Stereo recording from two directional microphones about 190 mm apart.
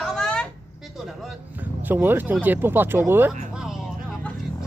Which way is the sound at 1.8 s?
10° right (ahead or behind).